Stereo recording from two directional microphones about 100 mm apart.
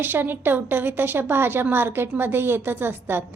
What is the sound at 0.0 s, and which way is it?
A woman's voice, 20° right (ahead or behind).